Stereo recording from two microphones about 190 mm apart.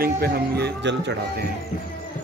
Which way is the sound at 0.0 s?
55° right (ahead or behind).